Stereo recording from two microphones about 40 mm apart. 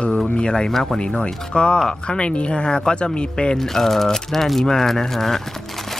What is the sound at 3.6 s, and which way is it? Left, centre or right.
Speech, centre.